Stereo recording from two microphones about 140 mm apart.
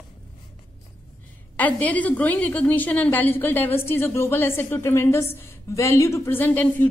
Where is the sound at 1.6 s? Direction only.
10° left (ahead or behind).